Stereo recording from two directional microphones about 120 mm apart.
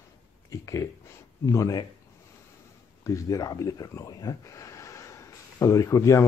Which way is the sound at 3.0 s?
30° left (ahead or behind).